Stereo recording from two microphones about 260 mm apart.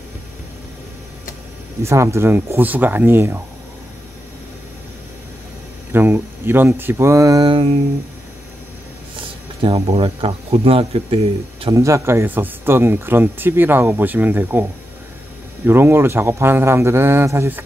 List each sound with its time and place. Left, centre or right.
1.8 s speech: centre
5.9 s speech: centre
9.6 s speech: right
11.6 s speech: centre